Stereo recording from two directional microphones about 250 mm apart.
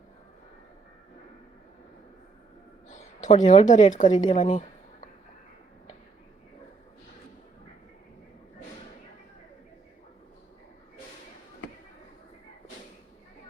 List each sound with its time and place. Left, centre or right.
2.9 s speech: left